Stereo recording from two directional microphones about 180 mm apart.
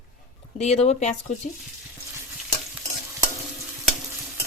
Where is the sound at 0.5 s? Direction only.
35° left (ahead or behind).